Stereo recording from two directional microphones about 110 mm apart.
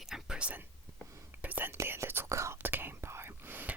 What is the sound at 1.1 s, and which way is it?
Whispering, 25° right (ahead or behind).